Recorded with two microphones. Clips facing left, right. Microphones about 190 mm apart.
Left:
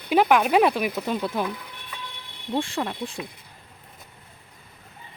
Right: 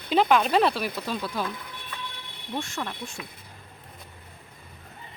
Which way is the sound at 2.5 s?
30° left (ahead or behind).